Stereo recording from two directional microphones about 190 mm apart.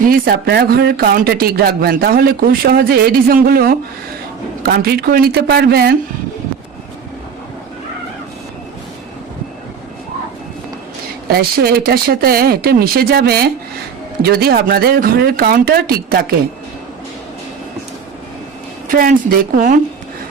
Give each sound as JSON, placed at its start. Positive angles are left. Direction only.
{"t": 0.1, "sound": "speech", "side_deg": -55}
{"t": 11.3, "sound": "speech", "side_deg": -55}
{"t": 18.9, "sound": "a woman's voice", "side_deg": -45}